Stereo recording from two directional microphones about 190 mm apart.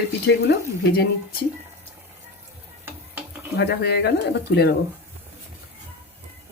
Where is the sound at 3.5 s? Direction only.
60° left (ahead or behind).